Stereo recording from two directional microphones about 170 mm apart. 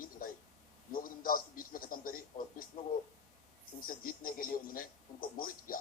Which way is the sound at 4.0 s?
55° left (ahead or behind).